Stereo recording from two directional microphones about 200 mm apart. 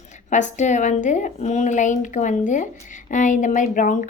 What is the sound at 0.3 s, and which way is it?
A woman's voice, 35° left (ahead or behind).